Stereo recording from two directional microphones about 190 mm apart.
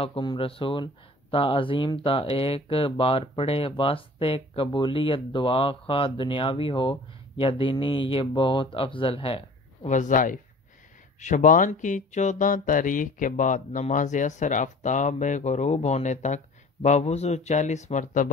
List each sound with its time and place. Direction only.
0.0 s speech: 25° left (ahead or behind)
9.8 s speech: 40° left (ahead or behind)